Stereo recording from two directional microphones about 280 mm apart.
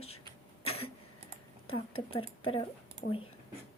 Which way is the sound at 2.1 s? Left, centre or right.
Centre.